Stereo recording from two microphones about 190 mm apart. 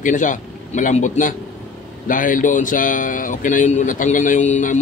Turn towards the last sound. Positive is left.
turn(degrees=40)  # may be behind; listen again after turning